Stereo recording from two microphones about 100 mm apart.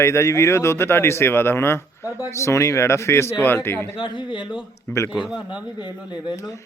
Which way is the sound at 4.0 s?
55° left (ahead or behind).